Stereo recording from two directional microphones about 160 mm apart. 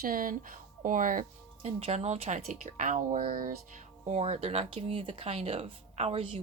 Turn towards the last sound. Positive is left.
turn(degrees=-35)  # may be behind; listen again after turning